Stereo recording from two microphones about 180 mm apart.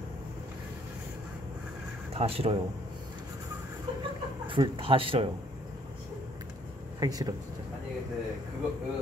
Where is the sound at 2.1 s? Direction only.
35° right (ahead or behind).